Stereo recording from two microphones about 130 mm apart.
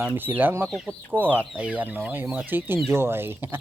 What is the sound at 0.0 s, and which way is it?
Speech, 15° right (ahead or behind).